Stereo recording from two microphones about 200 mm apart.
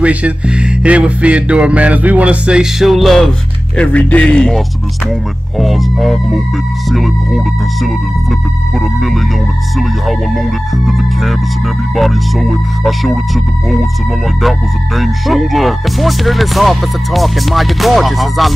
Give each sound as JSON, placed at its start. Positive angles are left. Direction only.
{"t": 0.0, "sound": "music", "side_deg": -5}
{"t": 11.9, "sound": "music", "side_deg": 0}
{"t": 15.0, "sound": "music", "side_deg": 0}